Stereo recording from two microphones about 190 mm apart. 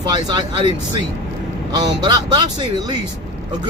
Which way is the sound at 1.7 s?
20° right (ahead or behind).